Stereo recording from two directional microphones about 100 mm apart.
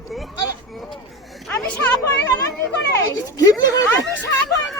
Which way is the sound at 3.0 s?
35° left (ahead or behind).